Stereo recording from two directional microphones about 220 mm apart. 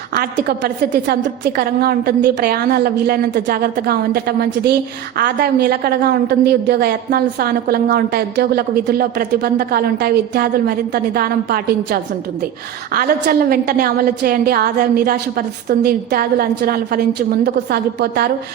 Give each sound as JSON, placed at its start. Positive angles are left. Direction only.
{"t": 0.1, "sound": "a woman's voice", "side_deg": -45}